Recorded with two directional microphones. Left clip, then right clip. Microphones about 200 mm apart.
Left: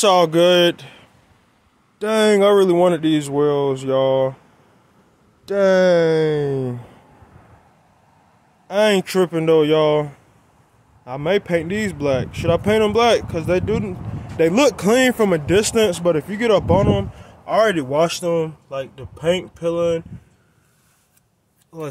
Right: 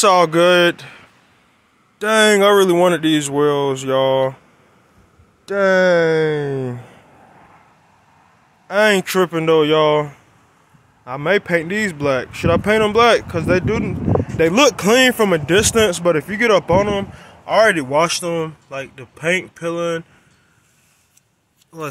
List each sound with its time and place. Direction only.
0.0 s speech: 5° left (ahead or behind)
5.4 s speech: 15° left (ahead or behind)
8.6 s speech: centre (ahead or behind)
21.7 s speech: 10° left (ahead or behind)